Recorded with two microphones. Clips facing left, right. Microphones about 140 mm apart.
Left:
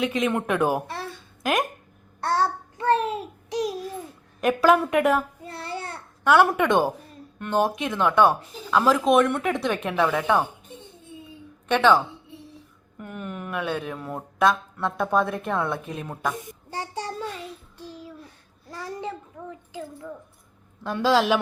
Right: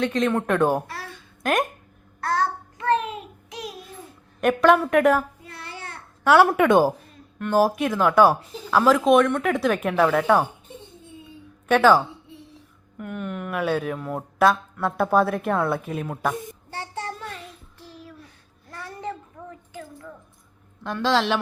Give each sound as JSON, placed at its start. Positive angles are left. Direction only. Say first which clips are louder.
{"t": 0.0, "sound": "a man's voice", "louder": "right 2 dB", "side_deg": 10}
{"t": 2.2, "sound": "child singing", "louder": "left 1 dB", "side_deg": 30}
{"t": 3.5, "sound": "a sound", "louder": "left 9 dB", "side_deg": 35}
{"t": 4.4, "sound": "a woman's voice", "louder": "right 1 dB", "side_deg": 0}
{"t": 5.5, "sound": "child singing", "louder": "left 5 dB", "side_deg": 30}
{"t": 6.2, "sound": "speech", "louder": "right 2 dB", "side_deg": -10}
{"t": 11.7, "sound": "speech", "louder": "right 2 dB", "side_deg": -5}
{"t": 16.6, "sound": "child singing", "louder": "left 4 dB", "side_deg": 15}
{"t": 17.7, "sound": "a sound", "louder": "even", "side_deg": 15}
{"t": 20.8, "sound": "a man's voice", "louder": "left 1 dB", "side_deg": 10}